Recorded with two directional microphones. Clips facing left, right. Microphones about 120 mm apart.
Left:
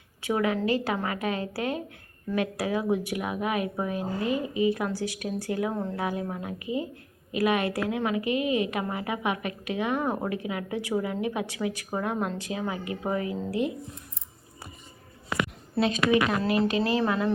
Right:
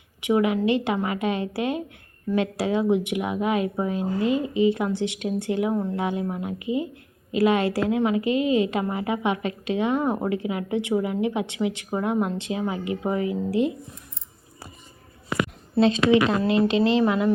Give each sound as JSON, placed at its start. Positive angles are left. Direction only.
{"t": 0.2, "sound": "a woman's voice", "side_deg": -20}
{"t": 15.7, "sound": "a woman's voice", "side_deg": -25}